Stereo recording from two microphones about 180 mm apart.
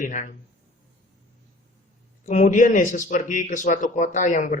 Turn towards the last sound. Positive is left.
turn(degrees=45)  # may be behind; listen again after turning